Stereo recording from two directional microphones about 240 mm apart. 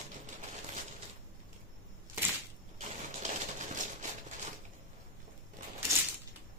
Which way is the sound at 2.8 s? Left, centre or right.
Right.